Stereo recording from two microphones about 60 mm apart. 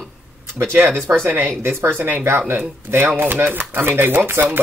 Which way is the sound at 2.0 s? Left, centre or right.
Right.